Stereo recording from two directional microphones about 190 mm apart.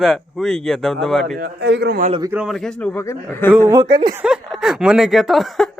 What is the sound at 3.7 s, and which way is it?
Speech, 20° right (ahead or behind).